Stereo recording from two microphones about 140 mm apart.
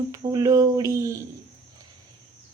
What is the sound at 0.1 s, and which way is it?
A woman's voice, 25° right (ahead or behind).